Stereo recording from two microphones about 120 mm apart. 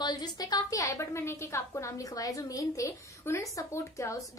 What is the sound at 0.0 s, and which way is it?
A woman's voice, 35° left (ahead or behind).